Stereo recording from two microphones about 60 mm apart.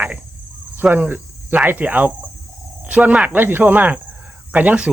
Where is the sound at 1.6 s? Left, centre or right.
Right.